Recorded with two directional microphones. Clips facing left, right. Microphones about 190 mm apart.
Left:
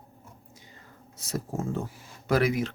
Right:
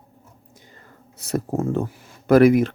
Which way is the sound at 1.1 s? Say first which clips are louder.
Right 8 dB; 60° right (ahead or behind).